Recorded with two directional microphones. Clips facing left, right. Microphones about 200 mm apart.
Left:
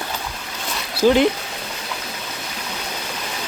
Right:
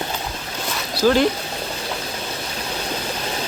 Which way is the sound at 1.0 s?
20° left (ahead or behind).